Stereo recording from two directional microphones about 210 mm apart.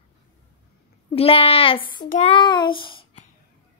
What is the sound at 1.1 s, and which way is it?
A child's voice, 25° left (ahead or behind).